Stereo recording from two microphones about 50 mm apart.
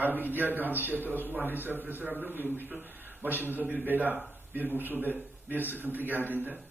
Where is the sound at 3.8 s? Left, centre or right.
Right.